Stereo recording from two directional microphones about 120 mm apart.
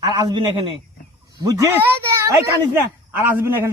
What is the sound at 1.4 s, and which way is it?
Speech, 30° right (ahead or behind).